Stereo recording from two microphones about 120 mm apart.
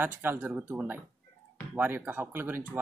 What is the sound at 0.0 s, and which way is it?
A man's voice, 15° right (ahead or behind).